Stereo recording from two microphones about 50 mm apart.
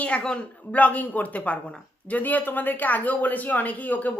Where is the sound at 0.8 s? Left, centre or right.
Left.